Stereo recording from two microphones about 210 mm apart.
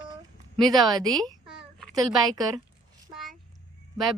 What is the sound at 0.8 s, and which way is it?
A woman's voice, 20° right (ahead or behind).